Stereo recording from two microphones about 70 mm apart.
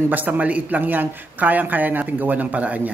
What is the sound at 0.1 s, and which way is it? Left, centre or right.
Speech, right.